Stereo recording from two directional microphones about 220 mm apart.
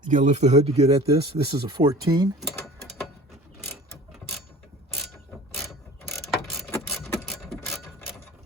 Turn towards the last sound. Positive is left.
turn(degrees=0)  # may be behind; listen again after turning